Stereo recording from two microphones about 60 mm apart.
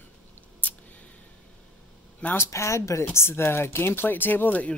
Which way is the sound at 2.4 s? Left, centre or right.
Left.